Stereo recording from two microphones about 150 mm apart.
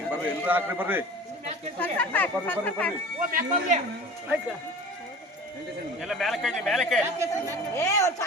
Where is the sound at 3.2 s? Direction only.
65° right (ahead or behind).